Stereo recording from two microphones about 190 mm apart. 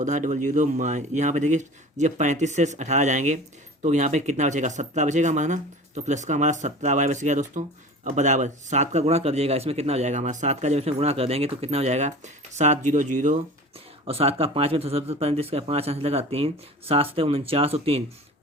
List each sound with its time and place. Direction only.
0.0 s speech: 40° right (ahead or behind)